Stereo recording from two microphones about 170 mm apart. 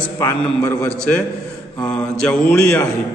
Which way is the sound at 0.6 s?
15° left (ahead or behind).